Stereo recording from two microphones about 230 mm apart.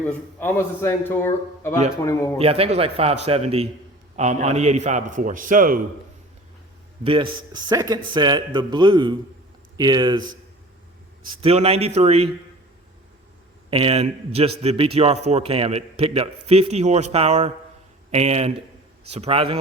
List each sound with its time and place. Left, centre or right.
0.1 s a man's voice: centre
2.4 s a man's voice: right
7.0 s a man's voice: right
11.3 s a man's voice: right
13.7 s a man's voice: right